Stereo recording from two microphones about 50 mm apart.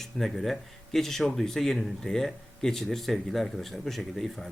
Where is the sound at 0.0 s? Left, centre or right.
Centre.